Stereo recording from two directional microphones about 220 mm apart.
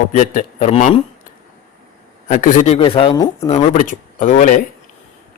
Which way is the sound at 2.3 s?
35° left (ahead or behind).